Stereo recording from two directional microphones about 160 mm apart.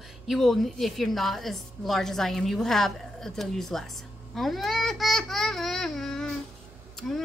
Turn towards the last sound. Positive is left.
turn(degrees=5)  # may be behind; listen again after turning